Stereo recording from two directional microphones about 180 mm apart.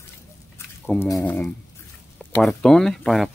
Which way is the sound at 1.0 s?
10° left (ahead or behind).